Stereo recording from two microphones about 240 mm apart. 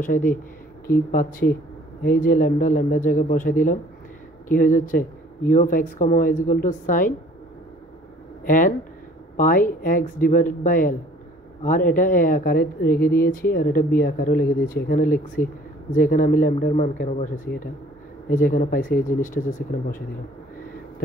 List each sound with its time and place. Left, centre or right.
0.0 s speech: left
8.5 s speech: left